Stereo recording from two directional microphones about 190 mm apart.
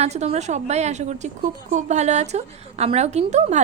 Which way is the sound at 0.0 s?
35° right (ahead or behind).